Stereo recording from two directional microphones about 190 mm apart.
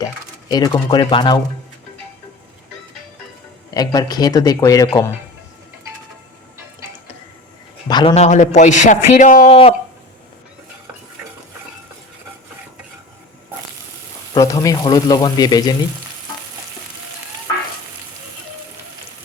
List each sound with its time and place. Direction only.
0.0 s speech: 20° left (ahead or behind)
3.8 s speech: 20° left (ahead or behind)
7.9 s speech: 20° left (ahead or behind)
8.1 s a man's voice: 35° left (ahead or behind)
9.5 s a man's voice: 30° left (ahead or behind)
14.3 s speech: 15° left (ahead or behind)